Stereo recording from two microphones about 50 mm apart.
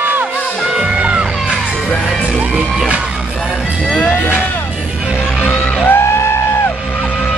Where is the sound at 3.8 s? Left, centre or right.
Left.